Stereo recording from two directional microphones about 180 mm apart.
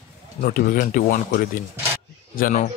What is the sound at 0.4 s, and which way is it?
Speech, 50° left (ahead or behind).